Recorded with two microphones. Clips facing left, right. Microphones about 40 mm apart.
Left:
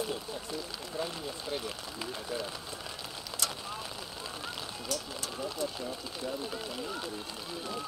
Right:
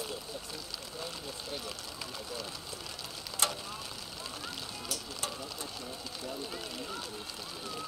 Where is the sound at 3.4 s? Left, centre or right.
Right.